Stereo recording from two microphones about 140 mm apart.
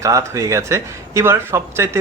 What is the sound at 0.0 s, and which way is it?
Speech, 20° right (ahead or behind).